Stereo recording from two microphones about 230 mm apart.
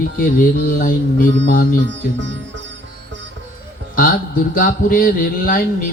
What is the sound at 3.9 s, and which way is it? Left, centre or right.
Speech, left.